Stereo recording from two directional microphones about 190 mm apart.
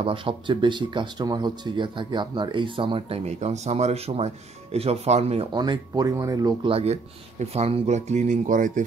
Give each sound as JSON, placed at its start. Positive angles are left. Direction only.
{"t": 0.0, "sound": "speech", "side_deg": -25}
{"t": 6.7, "sound": "speech", "side_deg": -35}